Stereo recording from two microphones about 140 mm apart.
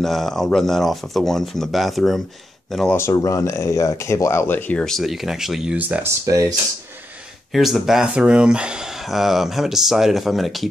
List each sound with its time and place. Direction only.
0.0 s speech: centre (ahead or behind)
2.9 s speech: 20° left (ahead or behind); by 6.1 s 10° right (ahead or behind)
6.2 s speech: 25° right (ahead or behind)
7.5 s speech: centre (ahead or behind)